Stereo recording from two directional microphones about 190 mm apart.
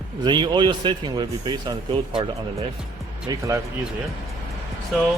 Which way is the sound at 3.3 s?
15° right (ahead or behind).